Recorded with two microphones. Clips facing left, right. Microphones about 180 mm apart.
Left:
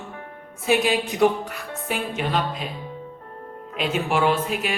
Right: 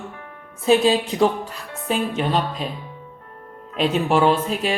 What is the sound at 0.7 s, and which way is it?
A woman's voice, 30° right (ahead or behind).